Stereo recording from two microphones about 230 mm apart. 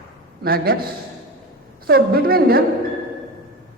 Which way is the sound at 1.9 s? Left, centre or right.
Right.